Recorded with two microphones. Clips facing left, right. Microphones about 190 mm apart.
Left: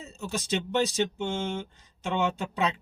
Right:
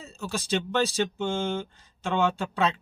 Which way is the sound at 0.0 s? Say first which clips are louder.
Right 1 dB; 20° left (ahead or behind).